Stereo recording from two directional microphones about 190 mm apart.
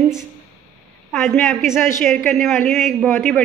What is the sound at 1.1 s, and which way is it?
A woman's voice, centre (ahead or behind).